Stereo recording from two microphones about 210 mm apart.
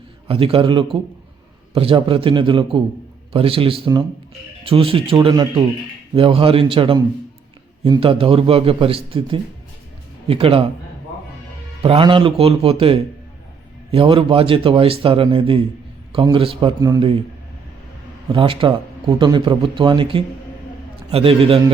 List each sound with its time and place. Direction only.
0.3 s speech: 25° right (ahead or behind)
11.8 s speech: 25° right (ahead or behind)
18.3 s speech: 25° right (ahead or behind)